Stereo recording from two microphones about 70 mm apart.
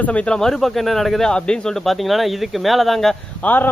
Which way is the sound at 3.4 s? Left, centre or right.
Left.